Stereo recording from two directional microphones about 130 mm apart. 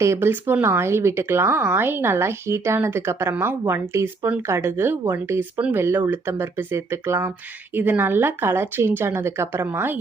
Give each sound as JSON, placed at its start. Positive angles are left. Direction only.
{"t": 0.0, "sound": "speech", "side_deg": -20}